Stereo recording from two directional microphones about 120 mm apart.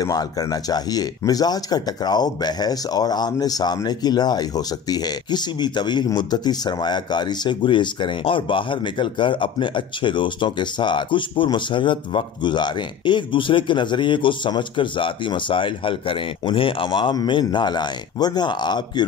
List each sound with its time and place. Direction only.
0.0 s speech: 30° left (ahead or behind)